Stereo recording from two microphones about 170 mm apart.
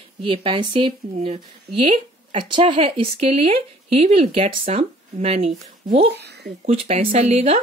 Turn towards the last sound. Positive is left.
turn(degrees=-40)  # may be behind; listen again after turning